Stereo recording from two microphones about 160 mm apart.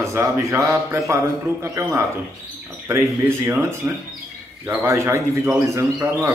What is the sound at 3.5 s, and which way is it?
A man's voice, 15° right (ahead or behind).